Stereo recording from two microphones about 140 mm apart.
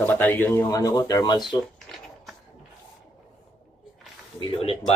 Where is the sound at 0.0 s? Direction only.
15° left (ahead or behind); by 1.5 s 30° left (ahead or behind).